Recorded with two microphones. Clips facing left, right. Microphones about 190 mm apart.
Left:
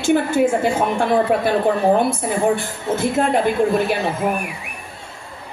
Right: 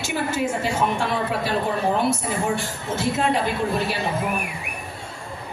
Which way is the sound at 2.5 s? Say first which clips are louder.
Left 5 dB; 50° left (ahead or behind).